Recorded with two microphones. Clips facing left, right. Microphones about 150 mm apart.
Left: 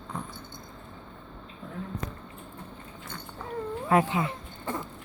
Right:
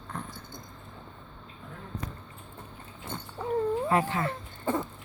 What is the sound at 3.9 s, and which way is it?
Speech, 15° left (ahead or behind).